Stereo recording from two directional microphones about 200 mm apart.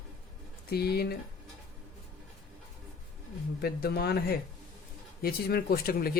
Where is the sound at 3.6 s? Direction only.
50° left (ahead or behind).